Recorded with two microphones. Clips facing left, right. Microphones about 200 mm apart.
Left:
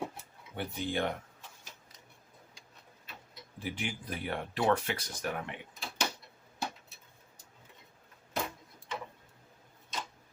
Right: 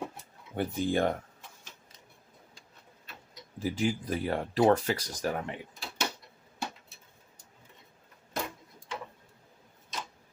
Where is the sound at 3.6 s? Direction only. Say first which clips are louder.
Right 8 dB; 40° right (ahead or behind).